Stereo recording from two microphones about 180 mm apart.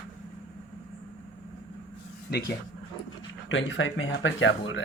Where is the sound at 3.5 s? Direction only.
90° left.